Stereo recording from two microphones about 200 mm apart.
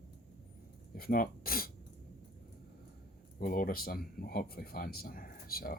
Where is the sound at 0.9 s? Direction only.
45° left (ahead or behind).